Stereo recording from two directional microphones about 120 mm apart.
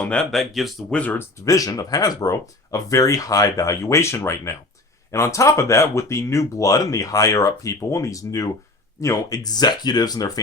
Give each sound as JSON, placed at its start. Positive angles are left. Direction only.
{"t": 0.0, "sound": "speech", "side_deg": 10}
{"t": 0.9, "sound": "speech", "side_deg": 10}
{"t": 1.5, "sound": "speech", "side_deg": 30}